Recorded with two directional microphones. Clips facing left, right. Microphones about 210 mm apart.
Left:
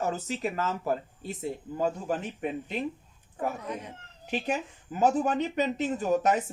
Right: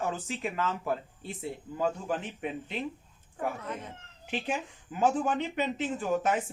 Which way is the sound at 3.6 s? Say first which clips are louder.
Left 2 dB; 15° left (ahead or behind).